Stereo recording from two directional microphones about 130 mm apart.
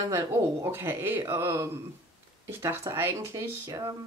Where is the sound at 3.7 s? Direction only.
30° right (ahead or behind).